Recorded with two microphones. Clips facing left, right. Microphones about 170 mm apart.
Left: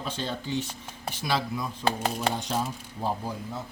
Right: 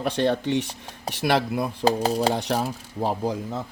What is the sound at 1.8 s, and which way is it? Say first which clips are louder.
Speech: right 6 dB; 35° right (ahead or behind).